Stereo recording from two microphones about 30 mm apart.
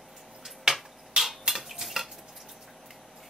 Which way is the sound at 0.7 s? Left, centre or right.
Right.